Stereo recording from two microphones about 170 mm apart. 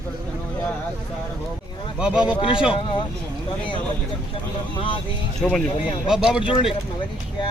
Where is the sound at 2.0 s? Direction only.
5° right (ahead or behind).